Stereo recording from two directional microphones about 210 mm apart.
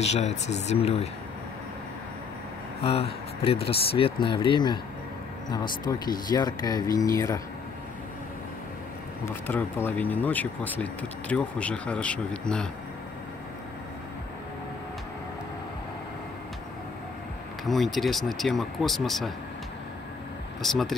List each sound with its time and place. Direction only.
0.0 s speech: 30° left (ahead or behind)
2.8 s speech: 25° left (ahead or behind)
9.2 s speech: 10° left (ahead or behind)
17.6 s speech: centre (ahead or behind)
20.6 s speech: centre (ahead or behind)